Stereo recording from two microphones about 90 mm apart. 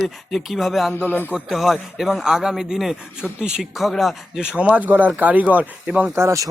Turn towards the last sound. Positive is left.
turn(degrees=-35)  # may be behind; listen again after turning